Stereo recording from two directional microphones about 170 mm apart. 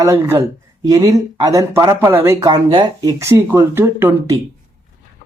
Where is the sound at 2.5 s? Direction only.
25° right (ahead or behind).